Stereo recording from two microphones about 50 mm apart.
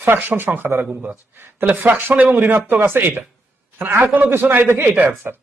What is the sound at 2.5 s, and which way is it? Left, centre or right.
Speech, right.